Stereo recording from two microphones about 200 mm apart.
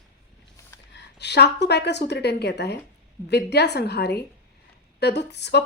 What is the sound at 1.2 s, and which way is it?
A woman's voice, 55° left (ahead or behind).